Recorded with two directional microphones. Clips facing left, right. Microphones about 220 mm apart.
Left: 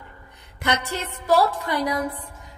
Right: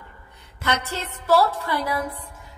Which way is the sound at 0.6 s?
15° left (ahead or behind).